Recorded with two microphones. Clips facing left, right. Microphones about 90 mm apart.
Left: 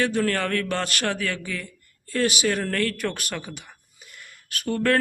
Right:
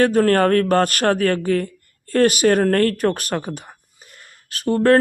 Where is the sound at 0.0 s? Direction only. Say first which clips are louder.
Right 9 dB; 45° right (ahead or behind).